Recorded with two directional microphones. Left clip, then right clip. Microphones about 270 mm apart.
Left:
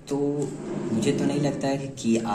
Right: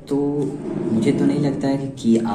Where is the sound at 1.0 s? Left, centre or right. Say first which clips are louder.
Right 5 dB; centre.